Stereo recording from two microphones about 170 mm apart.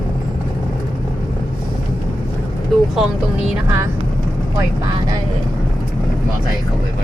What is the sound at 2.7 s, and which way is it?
Speech, centre (ahead or behind).